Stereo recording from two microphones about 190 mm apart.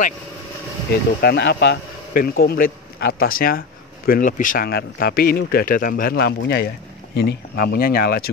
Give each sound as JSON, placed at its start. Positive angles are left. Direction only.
{"t": 1.2, "sound": "speech", "side_deg": 60}